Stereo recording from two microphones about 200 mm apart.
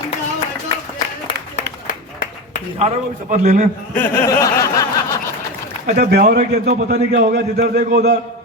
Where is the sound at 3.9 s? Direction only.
10° left (ahead or behind).